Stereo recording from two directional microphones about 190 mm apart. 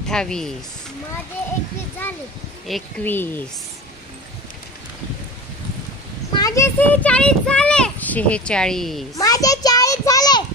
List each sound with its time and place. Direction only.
0.1 s speech: 5° left (ahead or behind)
2.0 s speech: 10° left (ahead or behind)
6.3 s speech: 15° left (ahead or behind); by 9.0 s centre (ahead or behind)
9.1 s a sound: 20° left (ahead or behind)